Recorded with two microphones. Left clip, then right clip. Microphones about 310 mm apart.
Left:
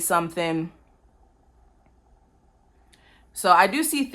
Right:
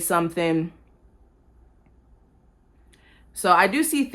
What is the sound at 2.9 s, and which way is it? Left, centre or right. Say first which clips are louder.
Speech: left 1 dB; left.